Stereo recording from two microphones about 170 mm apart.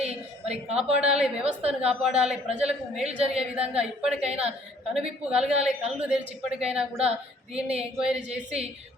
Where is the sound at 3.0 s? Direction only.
40° right (ahead or behind).